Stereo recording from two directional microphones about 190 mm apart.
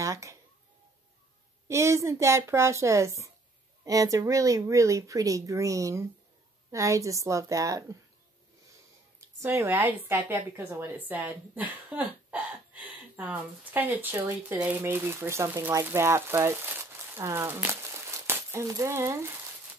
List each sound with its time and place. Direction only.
0.0 s a sound: 15° right (ahead or behind)
1.7 s a woman's voice: 15° right (ahead or behind)
9.4 s a woman's voice: 10° right (ahead or behind)